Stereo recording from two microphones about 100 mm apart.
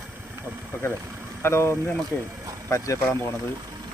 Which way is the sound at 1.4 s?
25° left (ahead or behind).